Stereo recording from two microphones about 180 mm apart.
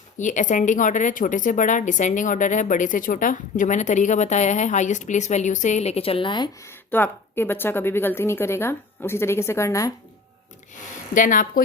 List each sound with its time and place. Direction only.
0.2 s speech: 45° left (ahead or behind); by 9.9 s 15° left (ahead or behind)
11.1 s a woman's voice: 50° left (ahead or behind)